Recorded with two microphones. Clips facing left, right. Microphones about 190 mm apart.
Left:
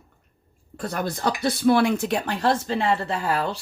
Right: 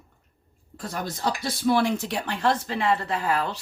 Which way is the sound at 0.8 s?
60° left (ahead or behind).